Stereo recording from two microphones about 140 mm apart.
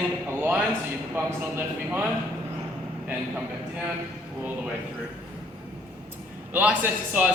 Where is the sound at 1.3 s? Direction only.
20° right (ahead or behind).